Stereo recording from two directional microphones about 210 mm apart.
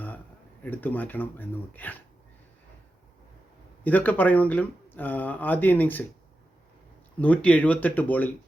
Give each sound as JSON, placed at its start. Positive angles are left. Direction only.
{"t": 0.6, "sound": "speech", "side_deg": 10}
{"t": 3.8, "sound": "speech", "side_deg": 10}
{"t": 7.2, "sound": "speech", "side_deg": 5}